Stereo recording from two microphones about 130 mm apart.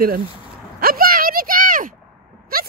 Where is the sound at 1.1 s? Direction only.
90° right.